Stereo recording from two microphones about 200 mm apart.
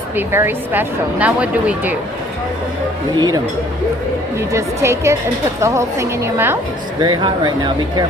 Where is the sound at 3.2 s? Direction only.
20° right (ahead or behind).